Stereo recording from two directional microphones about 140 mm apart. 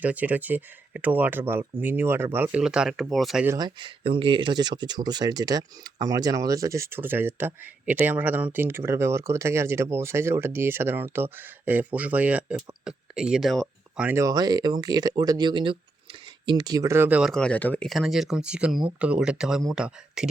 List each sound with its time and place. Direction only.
0.0 s speech: 10° right (ahead or behind)
3.6 s speech: 35° right (ahead or behind); by 14.2 s 5° right (ahead or behind)
14.2 s speech: 25° right (ahead or behind); by 17.3 s 10° right (ahead or behind)
17.3 s speech: 10° left (ahead or behind)
17.8 s speech: centre (ahead or behind)